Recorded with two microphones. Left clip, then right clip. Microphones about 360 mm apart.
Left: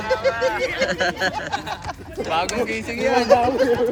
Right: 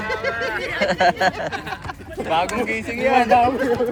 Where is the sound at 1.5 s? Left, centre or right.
Centre.